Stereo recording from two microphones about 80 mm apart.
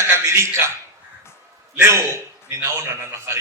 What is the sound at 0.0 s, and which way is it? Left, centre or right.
Speech, right.